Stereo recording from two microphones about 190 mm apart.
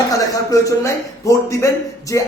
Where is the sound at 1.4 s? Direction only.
15° left (ahead or behind).